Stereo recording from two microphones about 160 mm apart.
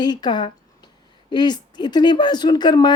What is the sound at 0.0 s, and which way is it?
Speech, 25° left (ahead or behind).